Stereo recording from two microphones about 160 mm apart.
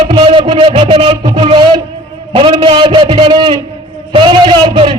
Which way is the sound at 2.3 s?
30° right (ahead or behind).